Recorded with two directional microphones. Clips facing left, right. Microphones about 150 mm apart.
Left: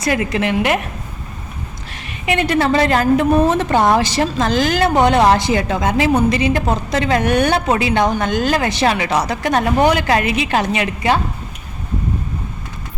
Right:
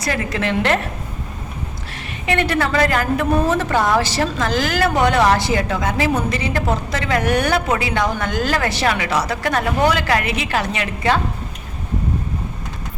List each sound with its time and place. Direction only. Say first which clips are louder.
0.0 s a woman's voice: left 4 dB; 20° left (ahead or behind)
2.2 s a woman's voice: left 3 dB; 20° left (ahead or behind)